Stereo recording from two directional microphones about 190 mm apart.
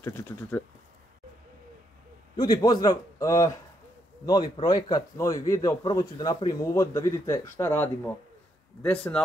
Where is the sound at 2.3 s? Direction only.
20° left (ahead or behind).